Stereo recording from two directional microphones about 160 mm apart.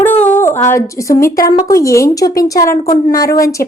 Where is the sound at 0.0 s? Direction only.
10° left (ahead or behind).